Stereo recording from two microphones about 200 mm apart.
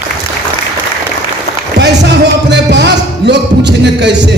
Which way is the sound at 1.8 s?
60° right (ahead or behind).